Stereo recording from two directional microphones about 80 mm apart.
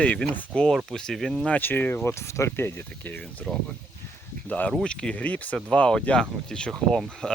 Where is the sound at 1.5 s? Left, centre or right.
Left.